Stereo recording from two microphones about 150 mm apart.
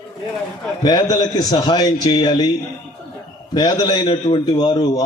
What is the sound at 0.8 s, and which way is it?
Speech, 30° left (ahead or behind).